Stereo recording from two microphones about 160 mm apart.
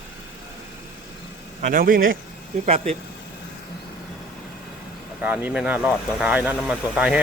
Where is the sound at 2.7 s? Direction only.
45° right (ahead or behind).